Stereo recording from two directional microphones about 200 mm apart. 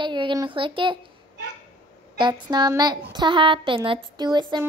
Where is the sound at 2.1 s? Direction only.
25° right (ahead or behind).